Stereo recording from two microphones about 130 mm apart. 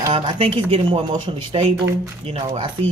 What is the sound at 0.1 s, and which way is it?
Speech, 45° right (ahead or behind).